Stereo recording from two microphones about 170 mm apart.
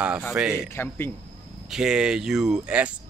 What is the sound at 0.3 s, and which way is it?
Speech, 5° right (ahead or behind).